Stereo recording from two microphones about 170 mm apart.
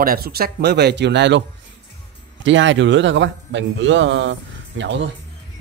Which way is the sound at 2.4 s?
90° right.